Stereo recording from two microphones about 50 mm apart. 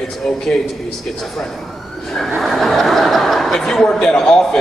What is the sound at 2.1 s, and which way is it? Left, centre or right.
A man's voice, centre.